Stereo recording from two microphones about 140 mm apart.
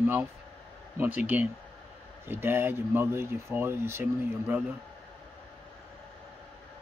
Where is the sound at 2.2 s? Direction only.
15° right (ahead or behind).